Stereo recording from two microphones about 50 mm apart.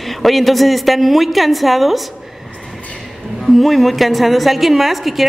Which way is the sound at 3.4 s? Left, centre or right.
Centre.